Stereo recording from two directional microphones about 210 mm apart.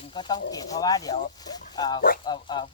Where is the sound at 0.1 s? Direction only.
20° left (ahead or behind).